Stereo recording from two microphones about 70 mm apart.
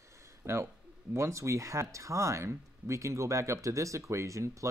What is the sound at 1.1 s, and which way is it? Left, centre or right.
Speech, right.